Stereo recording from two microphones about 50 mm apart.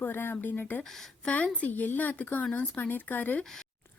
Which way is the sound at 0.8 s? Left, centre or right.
Centre.